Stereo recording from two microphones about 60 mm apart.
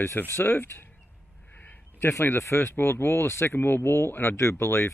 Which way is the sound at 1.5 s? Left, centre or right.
Left.